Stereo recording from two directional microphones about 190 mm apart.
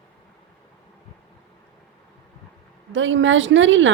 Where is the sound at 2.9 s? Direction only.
80° right.